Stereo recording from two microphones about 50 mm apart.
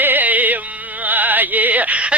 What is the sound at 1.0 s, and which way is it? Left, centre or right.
Music, right.